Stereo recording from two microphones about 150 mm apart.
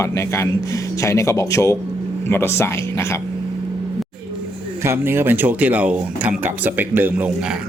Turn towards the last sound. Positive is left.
turn(degrees=-10)  # may be behind; listen again after turning